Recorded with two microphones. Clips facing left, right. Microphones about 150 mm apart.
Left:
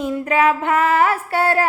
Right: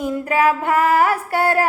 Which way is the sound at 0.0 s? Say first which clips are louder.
Even; 40° right (ahead or behind).